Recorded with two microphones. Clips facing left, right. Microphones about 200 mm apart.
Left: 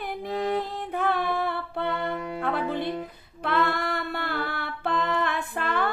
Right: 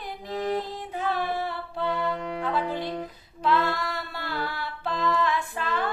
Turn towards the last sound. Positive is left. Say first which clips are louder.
# left 2 dB
turn(degrees=60)  # may be behind; listen again after turning